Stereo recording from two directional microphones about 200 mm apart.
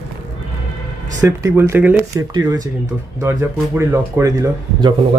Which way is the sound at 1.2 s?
15° right (ahead or behind).